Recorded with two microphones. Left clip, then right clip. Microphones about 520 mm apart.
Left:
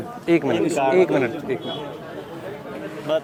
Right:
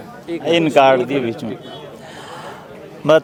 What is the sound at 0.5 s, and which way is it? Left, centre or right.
Speech, right.